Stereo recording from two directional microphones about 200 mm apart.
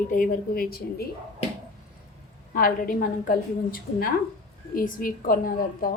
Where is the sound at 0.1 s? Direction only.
45° left (ahead or behind).